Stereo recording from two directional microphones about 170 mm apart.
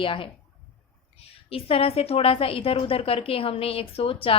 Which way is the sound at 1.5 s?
35° left (ahead or behind).